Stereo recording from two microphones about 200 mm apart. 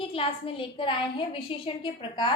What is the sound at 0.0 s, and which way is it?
A woman's voice, 25° left (ahead or behind).